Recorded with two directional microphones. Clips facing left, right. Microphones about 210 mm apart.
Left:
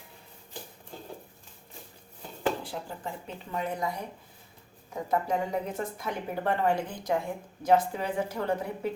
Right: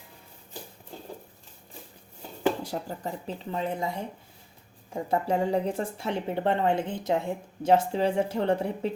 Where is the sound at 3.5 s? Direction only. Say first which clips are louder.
Right 1 dB; 30° right (ahead or behind).